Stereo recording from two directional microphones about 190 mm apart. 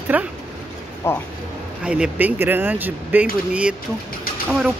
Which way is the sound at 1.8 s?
5° right (ahead or behind).